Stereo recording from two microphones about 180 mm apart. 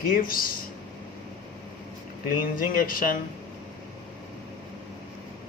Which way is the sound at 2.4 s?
50° left (ahead or behind).